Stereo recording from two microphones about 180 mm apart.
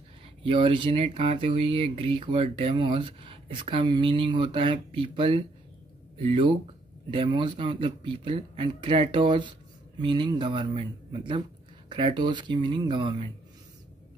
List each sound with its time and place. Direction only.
0.4 s speech: 30° right (ahead or behind)